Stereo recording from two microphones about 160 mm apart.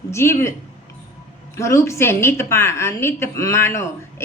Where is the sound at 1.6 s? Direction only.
20° left (ahead or behind).